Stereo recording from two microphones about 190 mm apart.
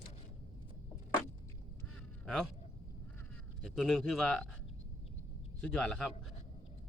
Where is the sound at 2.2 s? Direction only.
5° left (ahead or behind).